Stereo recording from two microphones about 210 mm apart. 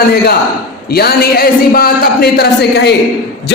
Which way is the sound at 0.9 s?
45° left (ahead or behind).